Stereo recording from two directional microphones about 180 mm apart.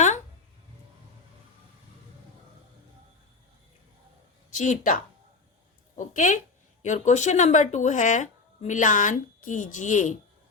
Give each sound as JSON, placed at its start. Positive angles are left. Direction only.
{"t": 4.5, "sound": "speech", "side_deg": 45}
{"t": 6.0, "sound": "speech", "side_deg": 45}